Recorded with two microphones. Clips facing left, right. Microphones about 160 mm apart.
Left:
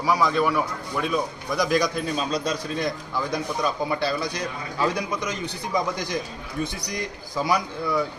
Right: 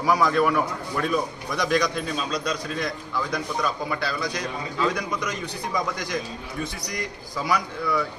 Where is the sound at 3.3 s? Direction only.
25° left (ahead or behind).